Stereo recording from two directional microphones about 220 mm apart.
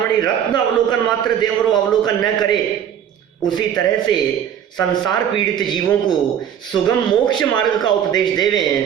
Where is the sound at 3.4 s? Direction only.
20° left (ahead or behind).